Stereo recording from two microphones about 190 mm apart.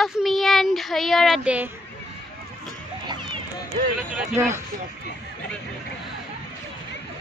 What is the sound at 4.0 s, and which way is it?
Speech, 5° right (ahead or behind).